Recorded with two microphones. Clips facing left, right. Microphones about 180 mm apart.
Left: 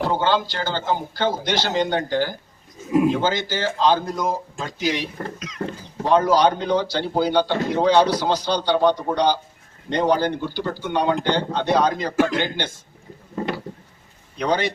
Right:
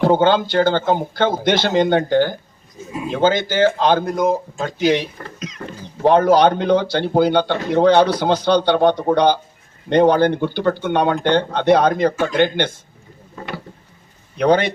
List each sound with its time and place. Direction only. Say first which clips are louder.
0.0 s a man's voice: right 6 dB; 55° right (ahead or behind)
14.3 s a man's voice: right 6 dB; 55° right (ahead or behind)